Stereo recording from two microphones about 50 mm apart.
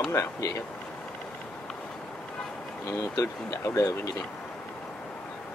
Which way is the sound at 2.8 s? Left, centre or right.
Left.